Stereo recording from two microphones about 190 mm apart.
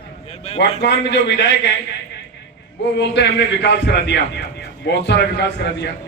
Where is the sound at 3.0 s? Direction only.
65° left (ahead or behind).